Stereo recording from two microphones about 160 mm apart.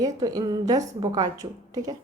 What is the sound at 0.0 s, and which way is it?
A woman's voice, 25° right (ahead or behind).